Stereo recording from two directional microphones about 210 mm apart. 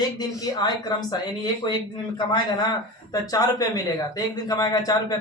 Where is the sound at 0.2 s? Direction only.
15° left (ahead or behind).